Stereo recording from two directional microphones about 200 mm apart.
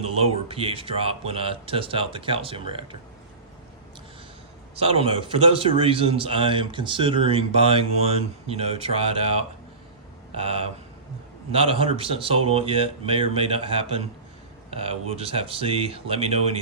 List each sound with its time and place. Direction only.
0.0 s a man's voice: 30° right (ahead or behind)
4.7 s a man's voice: 30° right (ahead or behind)